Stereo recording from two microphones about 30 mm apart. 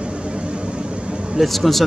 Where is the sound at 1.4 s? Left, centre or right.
Centre.